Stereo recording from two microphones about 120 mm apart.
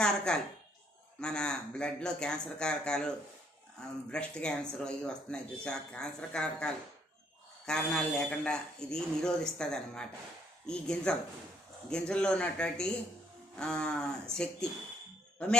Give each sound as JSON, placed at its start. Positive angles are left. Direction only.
{"t": 0.0, "sound": "a woman's voice", "side_deg": 5}